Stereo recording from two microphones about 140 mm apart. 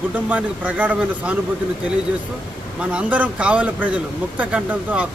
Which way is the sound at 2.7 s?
10° right (ahead or behind).